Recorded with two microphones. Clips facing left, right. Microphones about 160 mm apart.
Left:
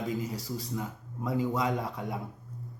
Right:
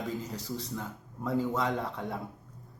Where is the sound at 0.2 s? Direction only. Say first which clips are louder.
Left 2 dB; 10° left (ahead or behind).